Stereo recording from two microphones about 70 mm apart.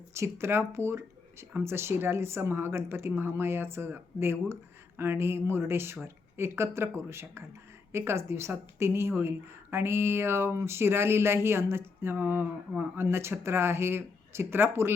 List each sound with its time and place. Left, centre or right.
0.1 s a woman's voice: right